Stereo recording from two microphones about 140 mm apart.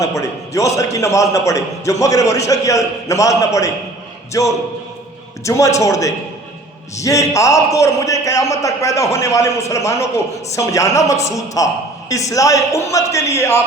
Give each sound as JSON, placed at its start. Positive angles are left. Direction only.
{"t": 0.0, "sound": "a man's voice", "side_deg": 20}